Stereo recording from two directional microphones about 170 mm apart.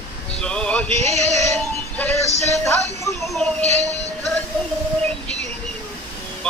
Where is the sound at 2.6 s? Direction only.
15° left (ahead or behind).